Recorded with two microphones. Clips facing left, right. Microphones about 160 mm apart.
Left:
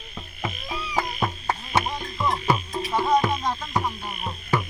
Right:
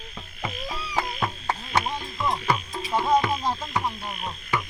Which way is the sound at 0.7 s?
10° left (ahead or behind).